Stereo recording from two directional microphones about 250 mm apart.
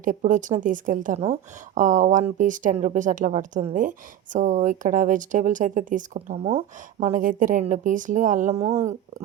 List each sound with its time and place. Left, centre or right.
0.0 s a woman's voice: right